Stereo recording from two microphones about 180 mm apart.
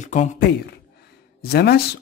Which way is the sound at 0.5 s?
65° left (ahead or behind).